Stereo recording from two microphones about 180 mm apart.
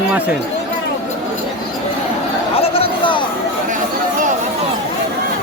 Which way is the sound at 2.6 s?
30° left (ahead or behind).